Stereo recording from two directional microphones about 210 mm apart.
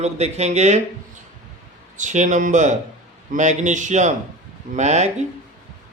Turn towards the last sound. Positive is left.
turn(degrees=-35)  # may be behind; listen again after turning